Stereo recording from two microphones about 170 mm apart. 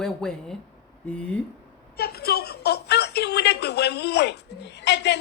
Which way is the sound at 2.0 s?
65° left (ahead or behind).